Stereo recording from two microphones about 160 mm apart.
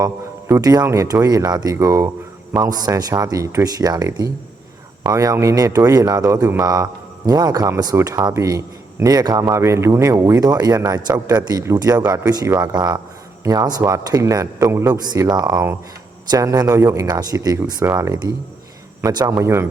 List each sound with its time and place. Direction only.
0.0 s a man's voice: 20° right (ahead or behind)